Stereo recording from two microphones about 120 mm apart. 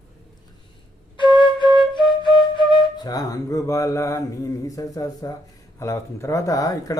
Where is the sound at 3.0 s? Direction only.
30° left (ahead or behind).